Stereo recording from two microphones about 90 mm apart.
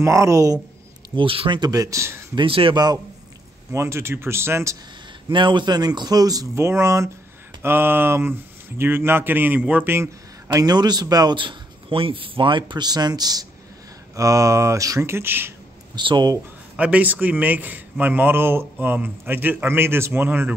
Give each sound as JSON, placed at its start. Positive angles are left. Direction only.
{"t": 0.0, "sound": "speech", "side_deg": -35}
{"t": 1.1, "sound": "speech", "side_deg": -80}
{"t": 1.6, "sound": "speech", "side_deg": -45}
{"t": 2.3, "sound": "speech", "side_deg": -85}
{"t": 2.7, "sound": "speech", "side_deg": -50}
{"t": 3.7, "sound": "a man's voice", "side_deg": -30}
{"t": 5.3, "sound": "a man's voice", "side_deg": -60}
{"t": 10.5, "sound": "speech", "side_deg": -45}
{"t": 11.3, "sound": "speech", "side_deg": -75}
{"t": 14.1, "sound": "speech", "side_deg": -35}
{"t": 16.0, "sound": "speech", "side_deg": -65}
{"t": 16.7, "sound": "a man's voice", "side_deg": -15}